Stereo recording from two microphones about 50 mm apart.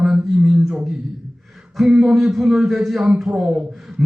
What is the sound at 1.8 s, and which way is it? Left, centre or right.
A man's voice, centre.